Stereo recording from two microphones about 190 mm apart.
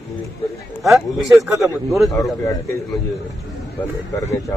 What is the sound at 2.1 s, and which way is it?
Speech, 20° left (ahead or behind).